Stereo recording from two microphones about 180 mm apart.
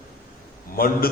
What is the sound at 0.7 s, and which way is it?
Speech, 55° left (ahead or behind).